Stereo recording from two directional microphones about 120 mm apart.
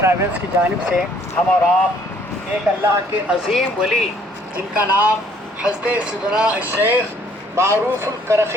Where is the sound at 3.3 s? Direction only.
Centre (ahead or behind).